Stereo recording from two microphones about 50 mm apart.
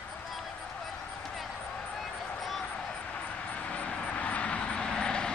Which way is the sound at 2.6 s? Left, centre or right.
Left.